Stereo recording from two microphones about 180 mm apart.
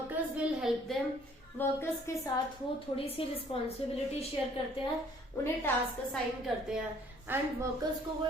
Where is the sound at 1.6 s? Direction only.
15° left (ahead or behind).